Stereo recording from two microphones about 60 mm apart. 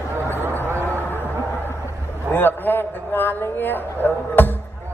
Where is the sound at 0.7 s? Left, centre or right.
Right.